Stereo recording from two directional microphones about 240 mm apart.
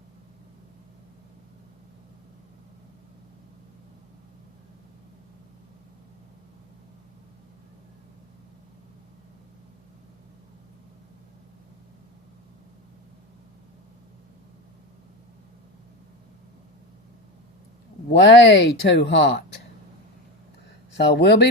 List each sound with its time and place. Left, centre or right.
18.1 s speech: left
21.1 s speech: left